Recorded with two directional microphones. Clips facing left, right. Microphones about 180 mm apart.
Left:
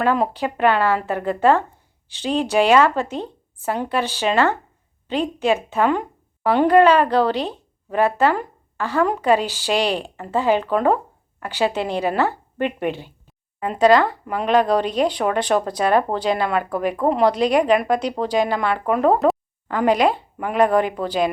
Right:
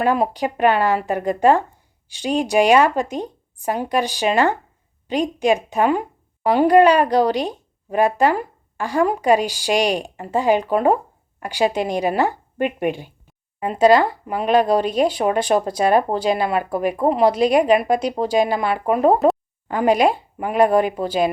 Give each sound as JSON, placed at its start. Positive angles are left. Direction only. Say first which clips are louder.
{"t": 0.0, "sound": "a woman's voice", "louder": "right 1 dB", "side_deg": -15}